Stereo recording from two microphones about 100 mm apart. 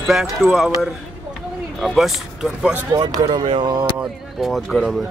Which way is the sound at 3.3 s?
60° right (ahead or behind).